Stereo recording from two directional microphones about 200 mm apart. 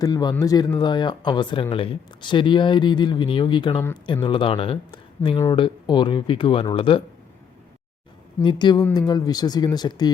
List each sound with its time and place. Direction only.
0.0 s speech: 20° left (ahead or behind)
8.4 s speech: 20° left (ahead or behind)